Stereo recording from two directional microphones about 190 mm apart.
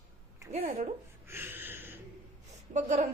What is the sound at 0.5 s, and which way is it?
Speech, 35° right (ahead or behind).